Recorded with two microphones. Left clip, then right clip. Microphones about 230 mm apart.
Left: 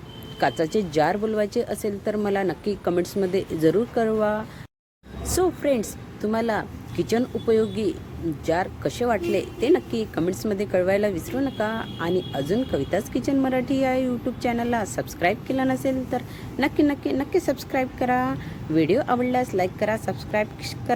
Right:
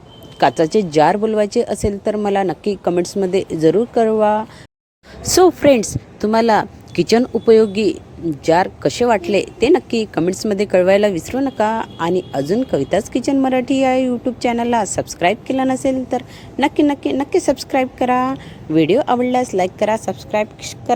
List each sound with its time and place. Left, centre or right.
0.3 s a woman's voice: right